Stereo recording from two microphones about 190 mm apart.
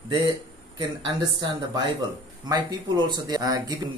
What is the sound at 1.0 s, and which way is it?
Speech, 20° right (ahead or behind).